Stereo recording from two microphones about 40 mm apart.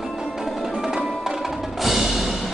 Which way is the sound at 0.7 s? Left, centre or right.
Centre.